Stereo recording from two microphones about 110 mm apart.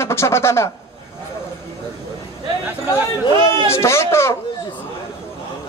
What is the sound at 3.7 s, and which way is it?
Speech, 25° left (ahead or behind).